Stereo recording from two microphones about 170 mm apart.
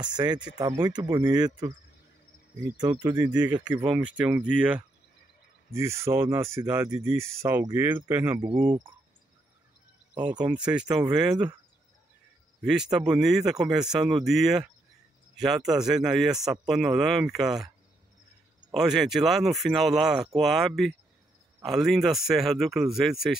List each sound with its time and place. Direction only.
0.0 s speech: 25° right (ahead or behind)
2.8 s speech: 25° right (ahead or behind)
4.2 s speech: 10° right (ahead or behind)
10.4 s speech: 5° right (ahead or behind)
12.6 s a man's voice: 5° right (ahead or behind)
18.7 s a man's voice: centre (ahead or behind)